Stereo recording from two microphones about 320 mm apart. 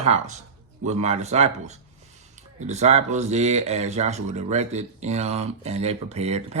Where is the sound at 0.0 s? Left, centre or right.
Centre.